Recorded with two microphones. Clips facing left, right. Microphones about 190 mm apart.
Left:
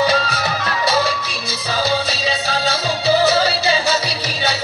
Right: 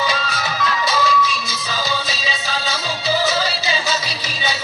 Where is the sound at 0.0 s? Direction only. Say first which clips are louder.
Left 5 dB; 65° left (ahead or behind).